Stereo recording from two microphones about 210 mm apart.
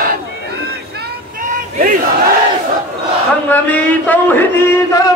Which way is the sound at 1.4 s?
40° right (ahead or behind).